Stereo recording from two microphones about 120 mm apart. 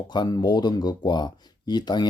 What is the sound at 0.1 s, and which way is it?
Speech, 35° left (ahead or behind).